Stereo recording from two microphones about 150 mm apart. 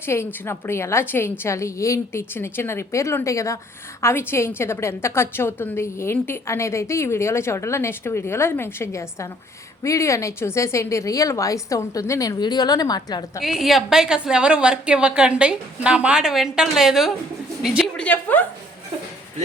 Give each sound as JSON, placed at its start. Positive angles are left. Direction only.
{"t": 0.0, "sound": "a woman's voice", "side_deg": 15}
{"t": 13.4, "sound": "a woman's voice", "side_deg": 0}